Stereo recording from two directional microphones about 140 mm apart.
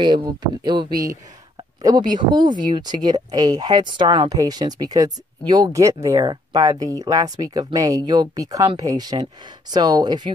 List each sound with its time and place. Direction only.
0.0 s speech: 35° right (ahead or behind)